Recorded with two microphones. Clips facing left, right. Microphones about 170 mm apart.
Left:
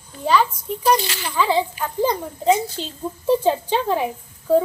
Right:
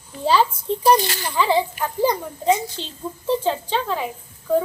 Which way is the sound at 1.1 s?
15° right (ahead or behind).